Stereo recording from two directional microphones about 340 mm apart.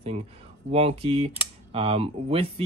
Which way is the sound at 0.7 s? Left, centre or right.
Centre.